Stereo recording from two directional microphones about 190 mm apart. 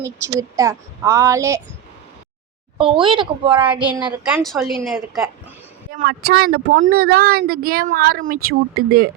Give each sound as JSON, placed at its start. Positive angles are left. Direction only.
{"t": 0.0, "sound": "a woman's voice", "side_deg": -15}
{"t": 2.7, "sound": "speech", "side_deg": -25}
{"t": 4.2, "sound": "speech", "side_deg": -5}
{"t": 5.9, "sound": "speech", "side_deg": -50}